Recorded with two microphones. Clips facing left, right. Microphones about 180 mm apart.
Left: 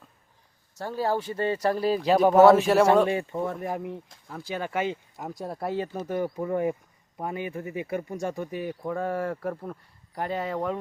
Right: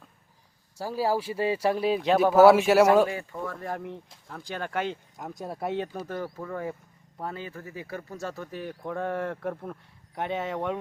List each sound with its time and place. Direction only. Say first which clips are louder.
0.8 s a man's voice: even; 5° right (ahead or behind)
3.1 s speech: left 6 dB; 25° left (ahead or behind); by 6.1 s 5° left (ahead or behind)
6.1 s speech: left 8 dB; 20° left (ahead or behind); by 10.8 s centre (ahead or behind)